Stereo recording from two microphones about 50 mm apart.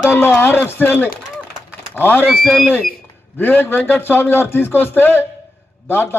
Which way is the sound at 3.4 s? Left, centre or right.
Left.